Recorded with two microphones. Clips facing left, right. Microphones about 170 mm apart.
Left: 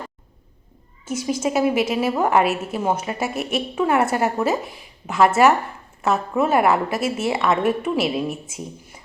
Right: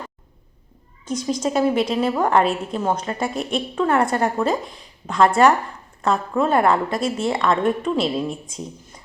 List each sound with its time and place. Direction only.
1.0 s a woman's voice: 5° left (ahead or behind)